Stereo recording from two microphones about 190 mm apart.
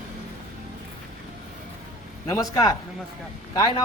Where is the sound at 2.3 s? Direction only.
15° left (ahead or behind).